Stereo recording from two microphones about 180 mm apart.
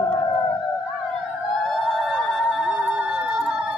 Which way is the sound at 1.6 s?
Centre (ahead or behind).